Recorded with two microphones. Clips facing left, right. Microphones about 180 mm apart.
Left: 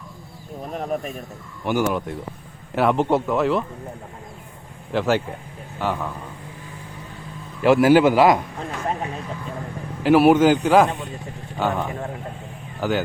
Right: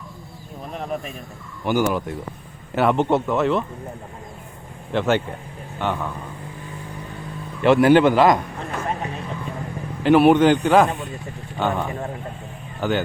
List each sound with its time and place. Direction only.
0.7 s speech: 45° left (ahead or behind)
1.6 s speech: centre (ahead or behind)
4.9 s speech: centre (ahead or behind)
7.6 s speech: 5° left (ahead or behind)
10.0 s speech: 5° left (ahead or behind)